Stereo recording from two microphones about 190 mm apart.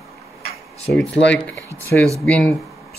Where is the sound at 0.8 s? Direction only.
Centre (ahead or behind).